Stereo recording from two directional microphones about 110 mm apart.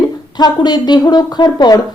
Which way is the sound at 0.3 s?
40° left (ahead or behind).